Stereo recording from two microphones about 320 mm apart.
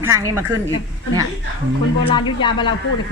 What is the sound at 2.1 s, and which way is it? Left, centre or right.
Speech, centre.